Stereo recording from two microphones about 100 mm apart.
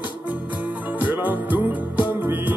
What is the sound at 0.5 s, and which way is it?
Music, 15° right (ahead or behind).